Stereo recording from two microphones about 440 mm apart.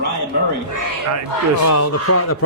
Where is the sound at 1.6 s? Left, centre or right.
Left.